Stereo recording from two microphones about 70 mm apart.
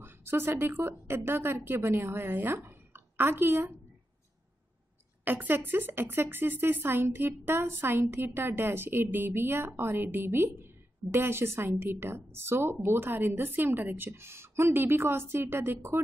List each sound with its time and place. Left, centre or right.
0.0 s a woman's voice: right
5.2 s a woman's voice: right